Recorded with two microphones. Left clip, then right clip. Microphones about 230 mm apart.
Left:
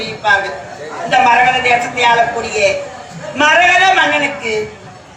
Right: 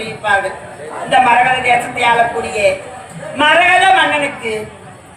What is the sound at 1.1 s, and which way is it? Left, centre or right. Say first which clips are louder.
A man's voice: even; left.